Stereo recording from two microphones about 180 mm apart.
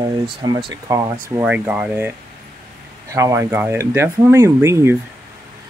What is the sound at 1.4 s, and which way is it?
Speech, 5° right (ahead or behind).